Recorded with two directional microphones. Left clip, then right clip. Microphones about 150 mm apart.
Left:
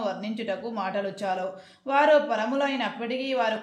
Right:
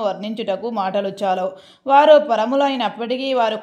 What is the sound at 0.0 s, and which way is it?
A woman's voice, 45° right (ahead or behind).